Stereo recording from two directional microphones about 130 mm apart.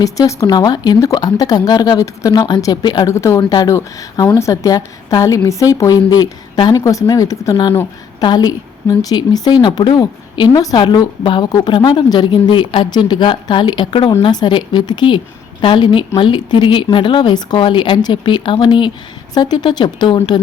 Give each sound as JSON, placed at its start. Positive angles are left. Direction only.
{"t": 0.0, "sound": "a woman's voice", "side_deg": 25}
{"t": 3.1, "sound": "a woman's voice", "side_deg": 20}
{"t": 7.5, "sound": "speech", "side_deg": 45}
{"t": 8.2, "sound": "a woman's voice", "side_deg": 30}